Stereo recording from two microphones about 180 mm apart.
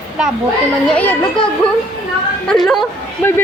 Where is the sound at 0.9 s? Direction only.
5° left (ahead or behind).